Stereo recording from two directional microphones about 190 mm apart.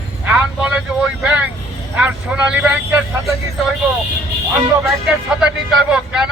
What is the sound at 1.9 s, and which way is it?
Speech, 5° right (ahead or behind).